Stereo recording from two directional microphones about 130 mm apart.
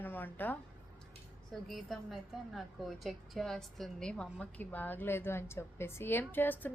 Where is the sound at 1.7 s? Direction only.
Centre (ahead or behind).